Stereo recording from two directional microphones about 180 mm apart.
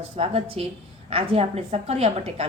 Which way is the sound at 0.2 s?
30° right (ahead or behind).